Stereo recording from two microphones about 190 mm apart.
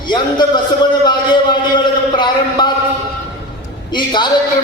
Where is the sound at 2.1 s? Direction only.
25° left (ahead or behind).